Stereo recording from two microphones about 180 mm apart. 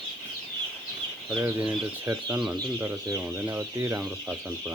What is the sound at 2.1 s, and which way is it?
Speech, 15° right (ahead or behind).